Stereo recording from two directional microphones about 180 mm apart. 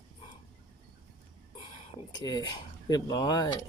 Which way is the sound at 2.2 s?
20° left (ahead or behind).